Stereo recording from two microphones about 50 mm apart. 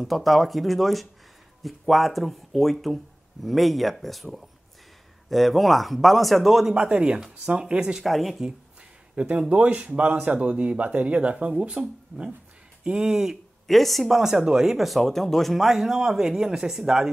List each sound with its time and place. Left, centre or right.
0.0 s speech: centre
6.7 s speech: right
8.0 s speech: centre
9.1 s speech: right
12.8 s speech: centre
13.7 s speech: centre